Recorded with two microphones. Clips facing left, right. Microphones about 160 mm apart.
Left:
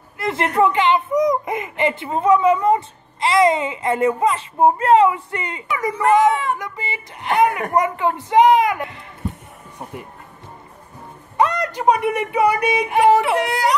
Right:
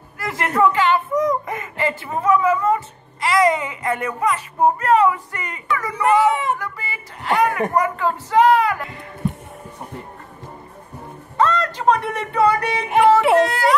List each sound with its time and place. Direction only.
0.2 s a sound: 25° left (ahead or behind)
0.6 s a child's voice: 20° left (ahead or behind)
6.3 s speech: 20° right (ahead or behind)
6.6 s a child's voice: 20° left (ahead or behind)
11.3 s speech: 15° left (ahead or behind)